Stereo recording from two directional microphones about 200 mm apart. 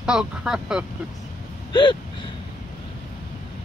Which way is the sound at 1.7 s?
20° left (ahead or behind).